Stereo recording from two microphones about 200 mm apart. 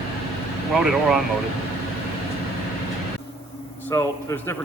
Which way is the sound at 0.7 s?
Centre (ahead or behind).